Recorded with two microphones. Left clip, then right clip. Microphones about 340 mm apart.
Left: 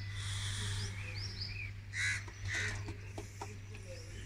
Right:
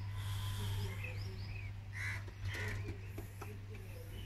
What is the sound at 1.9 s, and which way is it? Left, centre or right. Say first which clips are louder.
Crow: left 8 dB; right.